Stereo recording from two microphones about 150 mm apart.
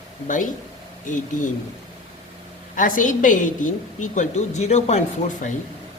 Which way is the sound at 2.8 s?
65° left (ahead or behind).